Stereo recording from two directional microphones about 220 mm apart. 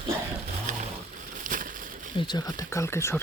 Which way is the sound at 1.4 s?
35° right (ahead or behind).